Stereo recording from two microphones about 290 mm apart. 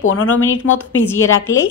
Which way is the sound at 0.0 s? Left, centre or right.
Left.